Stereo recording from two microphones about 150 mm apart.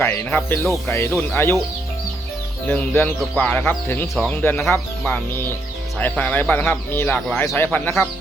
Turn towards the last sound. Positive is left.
turn(degrees=10)  # may be behind; listen again after turning